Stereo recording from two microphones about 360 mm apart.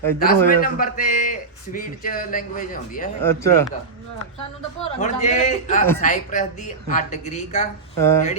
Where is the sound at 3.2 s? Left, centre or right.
Centre.